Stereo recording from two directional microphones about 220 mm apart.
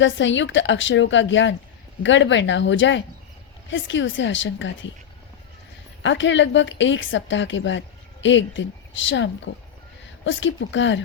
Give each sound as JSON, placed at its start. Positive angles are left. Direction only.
{"t": 0.0, "sound": "a woman's voice", "side_deg": 55}
{"t": 6.0, "sound": "a woman's voice", "side_deg": 55}